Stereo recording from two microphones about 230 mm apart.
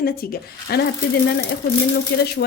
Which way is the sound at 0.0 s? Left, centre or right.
Left.